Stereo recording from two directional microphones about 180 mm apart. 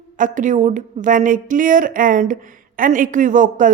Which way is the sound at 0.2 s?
45° right (ahead or behind).